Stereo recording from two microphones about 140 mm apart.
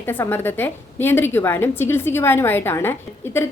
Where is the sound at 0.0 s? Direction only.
15° left (ahead or behind).